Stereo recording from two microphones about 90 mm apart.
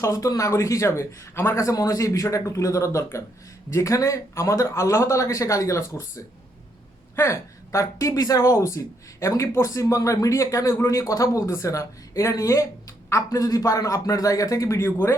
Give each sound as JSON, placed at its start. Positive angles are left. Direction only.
{"t": 0.0, "sound": "speech", "side_deg": 40}